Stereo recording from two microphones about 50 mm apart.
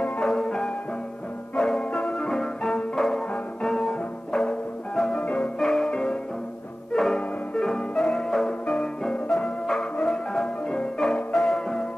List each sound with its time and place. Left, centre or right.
0.2 s music: centre
5.2 s music: left
5.6 s music: centre
5.9 s music: centre
6.9 s music: centre